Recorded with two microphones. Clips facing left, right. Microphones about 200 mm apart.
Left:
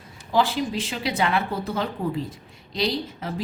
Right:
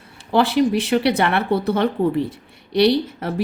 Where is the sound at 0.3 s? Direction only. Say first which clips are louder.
Right 6 dB; 70° right (ahead or behind).